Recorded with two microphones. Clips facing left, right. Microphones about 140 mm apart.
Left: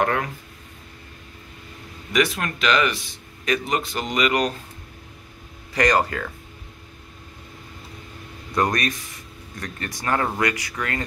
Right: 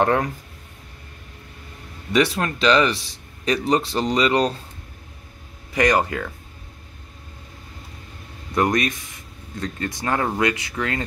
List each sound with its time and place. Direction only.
0.0 s speech: 30° right (ahead or behind)
2.1 s speech: 30° right (ahead or behind)
5.8 s speech: 20° right (ahead or behind)
8.5 s speech: 20° right (ahead or behind)